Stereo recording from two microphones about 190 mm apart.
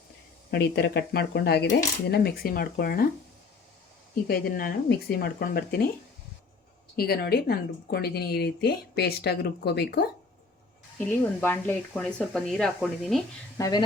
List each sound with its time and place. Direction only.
0.5 s a woman's voice: 60° left (ahead or behind)
4.3 s speech: 50° left (ahead or behind)
6.9 s a woman's voice: 55° left (ahead or behind)
11.0 s speech: 10° left (ahead or behind)
13.6 s speech: 20° left (ahead or behind)